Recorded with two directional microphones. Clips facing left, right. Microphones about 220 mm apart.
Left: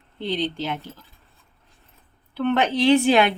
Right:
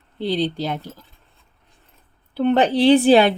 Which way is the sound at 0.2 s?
35° right (ahead or behind).